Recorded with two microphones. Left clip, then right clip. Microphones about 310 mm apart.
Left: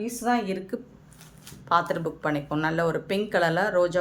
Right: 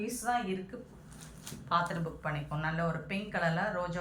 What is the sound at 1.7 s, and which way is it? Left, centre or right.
Speech, centre.